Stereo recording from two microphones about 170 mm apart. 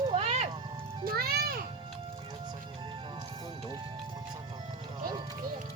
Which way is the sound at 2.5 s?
25° right (ahead or behind).